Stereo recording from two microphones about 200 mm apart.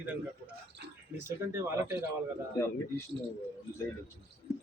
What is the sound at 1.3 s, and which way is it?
Speech, 10° right (ahead or behind).